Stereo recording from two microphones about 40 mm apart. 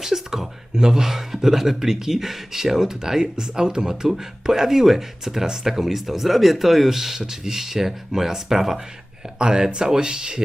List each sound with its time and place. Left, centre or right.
0.0 s speech: centre